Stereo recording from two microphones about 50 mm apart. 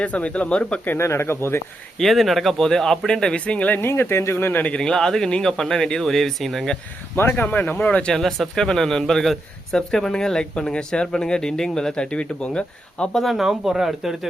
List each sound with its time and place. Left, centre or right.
0.0 s speech: left
0.9 s speech: left
2.0 s a man's voice: centre
3.4 s speech: left
3.8 s speech: left
4.7 s a man's voice: centre
7.3 s speech: left
8.0 s a man's voice: centre
13.1 s speech: centre